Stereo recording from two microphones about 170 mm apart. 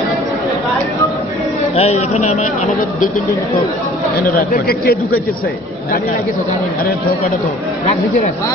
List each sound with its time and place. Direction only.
1.8 s speech: 40° left (ahead or behind)
4.5 s a man's voice: 60° left (ahead or behind)